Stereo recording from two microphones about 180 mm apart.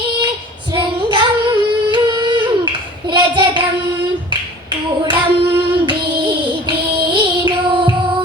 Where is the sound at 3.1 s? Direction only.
25° right (ahead or behind).